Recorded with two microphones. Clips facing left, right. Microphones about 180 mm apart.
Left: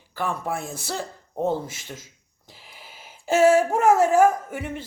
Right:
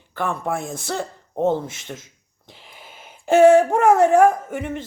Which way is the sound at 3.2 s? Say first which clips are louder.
Right 5 dB; 60° right (ahead or behind).